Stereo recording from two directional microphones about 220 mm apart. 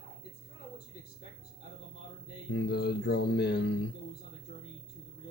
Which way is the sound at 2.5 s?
50° left (ahead or behind).